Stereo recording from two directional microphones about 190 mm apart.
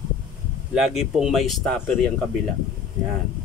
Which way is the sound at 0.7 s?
Centre (ahead or behind).